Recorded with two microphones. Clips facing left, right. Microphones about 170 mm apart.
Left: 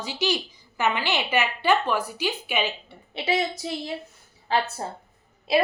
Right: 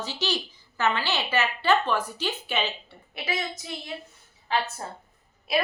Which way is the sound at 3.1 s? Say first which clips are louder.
Left 6 dB; 30° left (ahead or behind).